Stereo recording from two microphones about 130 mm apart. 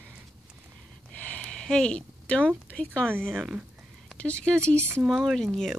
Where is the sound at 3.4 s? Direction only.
10° right (ahead or behind).